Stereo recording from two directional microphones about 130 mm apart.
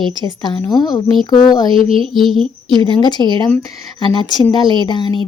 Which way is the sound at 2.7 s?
35° left (ahead or behind).